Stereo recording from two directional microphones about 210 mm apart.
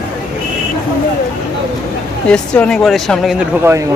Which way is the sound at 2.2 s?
5° left (ahead or behind).